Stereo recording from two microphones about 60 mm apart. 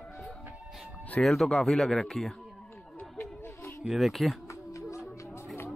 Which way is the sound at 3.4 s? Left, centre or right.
Left.